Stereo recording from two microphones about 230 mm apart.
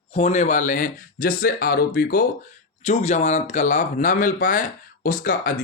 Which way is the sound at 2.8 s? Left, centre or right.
Left.